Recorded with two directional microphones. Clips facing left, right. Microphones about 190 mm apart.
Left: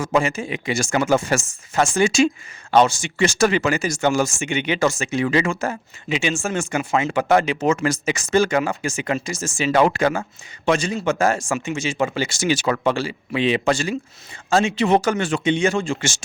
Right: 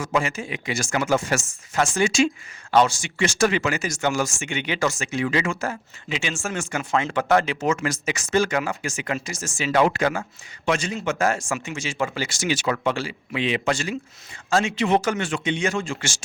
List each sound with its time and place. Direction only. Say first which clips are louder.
0.0 s speech: left 4 dB; 25° left (ahead or behind)
2.7 s speech: left 3 dB; 25° left (ahead or behind)
3.2 s speech: left 3 dB; 35° left (ahead or behind)
6.9 s speech: left 2 dB; 10° left (ahead or behind); by 14.8 s 25° left (ahead or behind)
14.8 s speech: left 3 dB; 40° left (ahead or behind)